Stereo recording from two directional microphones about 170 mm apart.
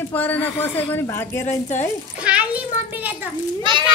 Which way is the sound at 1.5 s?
45° left (ahead or behind).